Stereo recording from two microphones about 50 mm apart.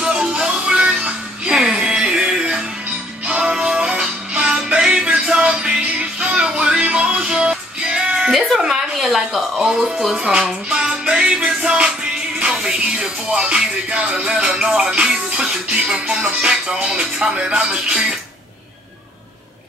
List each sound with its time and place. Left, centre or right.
0.0 s music: centre
8.3 s speech: centre
9.9 s music: centre
10.7 s music: centre